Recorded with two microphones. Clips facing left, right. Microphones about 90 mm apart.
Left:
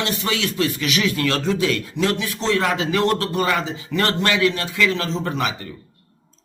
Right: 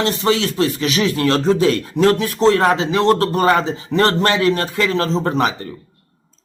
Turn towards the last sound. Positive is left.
turn(degrees=-35)  # may be behind; listen again after turning